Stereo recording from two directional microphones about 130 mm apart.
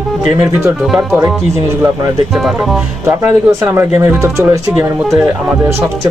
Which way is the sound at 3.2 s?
20° right (ahead or behind).